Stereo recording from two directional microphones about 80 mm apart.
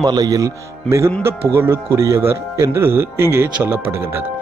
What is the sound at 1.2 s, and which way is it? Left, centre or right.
A man's voice, right.